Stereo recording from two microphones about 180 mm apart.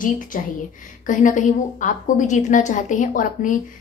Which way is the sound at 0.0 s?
45° left (ahead or behind).